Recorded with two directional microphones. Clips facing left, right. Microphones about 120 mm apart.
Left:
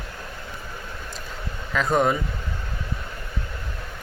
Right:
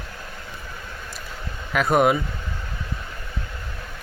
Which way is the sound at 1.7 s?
10° right (ahead or behind).